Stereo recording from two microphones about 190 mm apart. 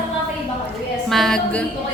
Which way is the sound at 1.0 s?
Centre (ahead or behind).